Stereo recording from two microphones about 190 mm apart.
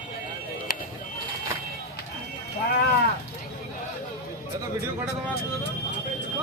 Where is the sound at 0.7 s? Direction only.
50° left (ahead or behind).